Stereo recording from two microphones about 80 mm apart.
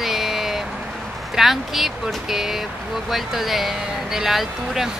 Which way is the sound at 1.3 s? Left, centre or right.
Centre.